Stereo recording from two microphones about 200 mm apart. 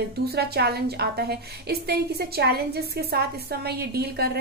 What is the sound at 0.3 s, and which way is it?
A woman's voice, 55° right (ahead or behind).